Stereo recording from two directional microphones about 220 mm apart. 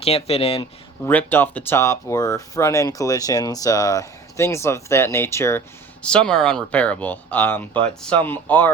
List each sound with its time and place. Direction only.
0.0 s speech: 25° left (ahead or behind)
1.0 s speech: 10° left (ahead or behind)